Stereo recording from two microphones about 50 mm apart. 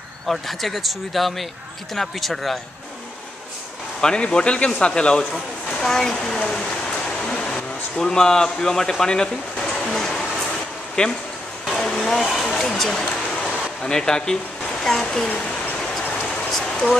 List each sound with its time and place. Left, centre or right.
0.3 s speech: centre
4.0 s speech: centre
5.8 s a sound: centre
8.0 s speech: centre
9.7 s music: centre
11.0 s speech: centre
11.6 s vehicle: centre
12.3 s a sound: centre
12.5 s a sound: centre
15.2 s speech: left
16.4 s rain: centre